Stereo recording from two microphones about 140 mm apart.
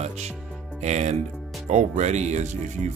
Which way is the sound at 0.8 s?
55° right (ahead or behind).